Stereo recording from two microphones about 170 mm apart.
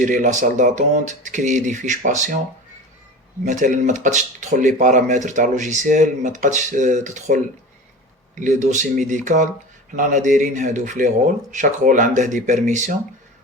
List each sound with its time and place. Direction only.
0.0 s speech: 50° right (ahead or behind)
3.4 s speech: 50° right (ahead or behind)